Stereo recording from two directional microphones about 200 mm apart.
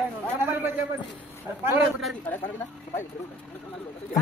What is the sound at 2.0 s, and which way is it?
Speech, 5° left (ahead or behind).